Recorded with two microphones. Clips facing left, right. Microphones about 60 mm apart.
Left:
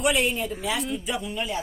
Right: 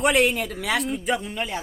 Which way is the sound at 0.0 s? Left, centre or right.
Right.